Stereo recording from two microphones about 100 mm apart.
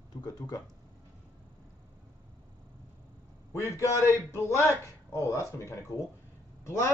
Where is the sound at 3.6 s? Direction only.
30° left (ahead or behind).